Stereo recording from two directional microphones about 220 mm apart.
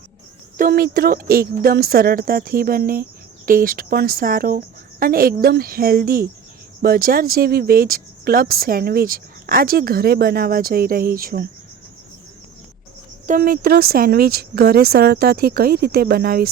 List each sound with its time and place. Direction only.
0.5 s a woman's voice: 40° right (ahead or behind)
13.2 s speech: 40° right (ahead or behind)